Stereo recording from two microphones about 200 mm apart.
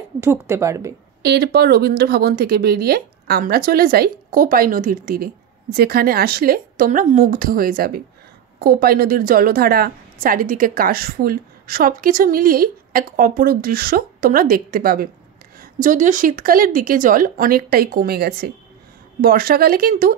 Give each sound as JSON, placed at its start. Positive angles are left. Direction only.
{"t": 0.2, "sound": "a woman's voice", "side_deg": -15}
{"t": 1.2, "sound": "speech", "side_deg": -55}